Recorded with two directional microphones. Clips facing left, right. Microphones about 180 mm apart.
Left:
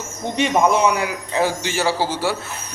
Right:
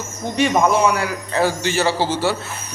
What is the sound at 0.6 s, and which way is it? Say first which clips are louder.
A man's voice: even; 20° left (ahead or behind).